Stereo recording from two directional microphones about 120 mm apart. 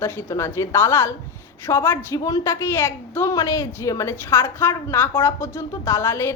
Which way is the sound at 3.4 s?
30° left (ahead or behind).